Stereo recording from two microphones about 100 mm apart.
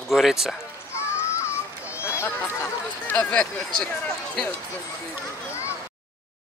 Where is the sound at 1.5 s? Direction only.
25° left (ahead or behind).